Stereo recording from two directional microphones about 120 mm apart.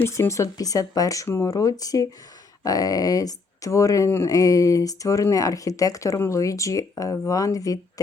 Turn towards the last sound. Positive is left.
turn(degrees=30)  # may be behind; listen again after turning